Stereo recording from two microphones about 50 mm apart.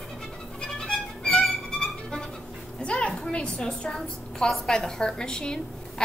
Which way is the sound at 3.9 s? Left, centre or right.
Centre.